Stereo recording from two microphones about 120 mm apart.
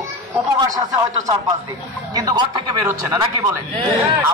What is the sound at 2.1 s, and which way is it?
Speech, 30° right (ahead or behind).